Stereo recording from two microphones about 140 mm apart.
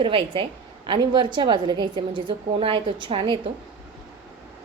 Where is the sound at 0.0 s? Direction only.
40° right (ahead or behind).